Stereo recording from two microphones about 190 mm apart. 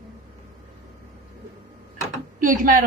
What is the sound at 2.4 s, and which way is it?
Speech, 45° right (ahead or behind).